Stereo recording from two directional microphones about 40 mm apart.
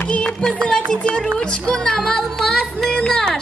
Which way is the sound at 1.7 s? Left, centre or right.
Centre.